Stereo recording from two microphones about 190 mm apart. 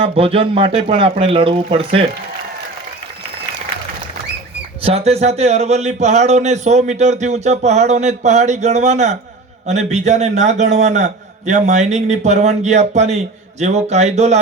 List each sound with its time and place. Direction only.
0.0 s speech: 30° right (ahead or behind)
4.8 s a man's voice: 30° right (ahead or behind)